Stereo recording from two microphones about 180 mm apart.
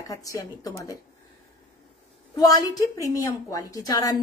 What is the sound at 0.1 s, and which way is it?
Speech, 20° left (ahead or behind).